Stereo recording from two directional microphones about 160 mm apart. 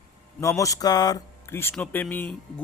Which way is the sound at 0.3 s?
20° left (ahead or behind).